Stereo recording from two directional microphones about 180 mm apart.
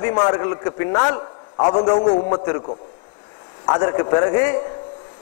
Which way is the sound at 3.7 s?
25° left (ahead or behind).